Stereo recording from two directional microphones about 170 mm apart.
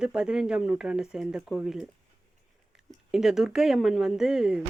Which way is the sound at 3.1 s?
Centre (ahead or behind).